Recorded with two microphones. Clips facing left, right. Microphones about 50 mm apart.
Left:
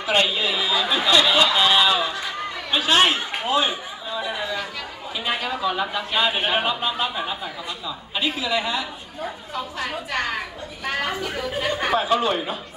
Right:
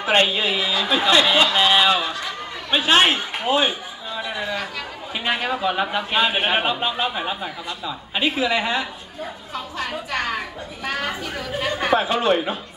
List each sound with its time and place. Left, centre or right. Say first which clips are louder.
0.0 s a man's voice: right 2 dB; right
5.4 s a man's voice: right 2 dB; right
9.5 s a woman's voice: right 1 dB; centre
12.0 s a woman's voice: right 2 dB; right